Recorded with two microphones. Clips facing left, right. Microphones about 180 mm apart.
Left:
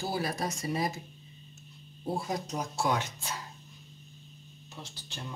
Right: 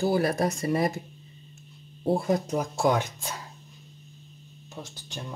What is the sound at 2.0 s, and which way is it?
Speech, 55° right (ahead or behind).